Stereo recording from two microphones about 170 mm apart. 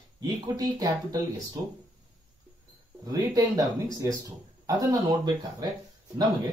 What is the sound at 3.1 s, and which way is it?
Speech, 20° right (ahead or behind).